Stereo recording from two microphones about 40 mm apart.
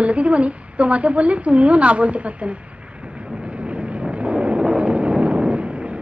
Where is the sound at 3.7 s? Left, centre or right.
Right.